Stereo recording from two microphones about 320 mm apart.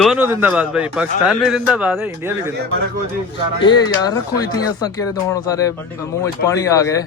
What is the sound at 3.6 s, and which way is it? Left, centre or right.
Speech, centre.